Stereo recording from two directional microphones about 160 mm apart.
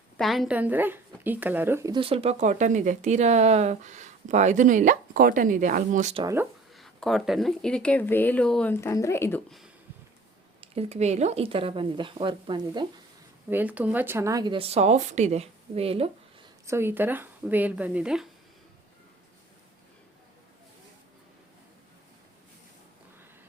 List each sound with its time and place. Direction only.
0.2 s speech: centre (ahead or behind)
1.9 s speech: 35° right (ahead or behind)
6.2 s speech: 15° right (ahead or behind)
6.7 s a woman's voice: centre (ahead or behind)
10.6 s speech: 40° right (ahead or behind)
13.5 s speech: 10° right (ahead or behind); by 16.0 s 40° right (ahead or behind)
16.6 s speech: 15° right (ahead or behind)